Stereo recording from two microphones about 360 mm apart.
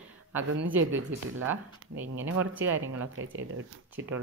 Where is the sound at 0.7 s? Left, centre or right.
Right.